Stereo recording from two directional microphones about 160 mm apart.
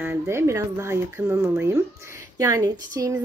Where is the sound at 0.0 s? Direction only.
15° right (ahead or behind).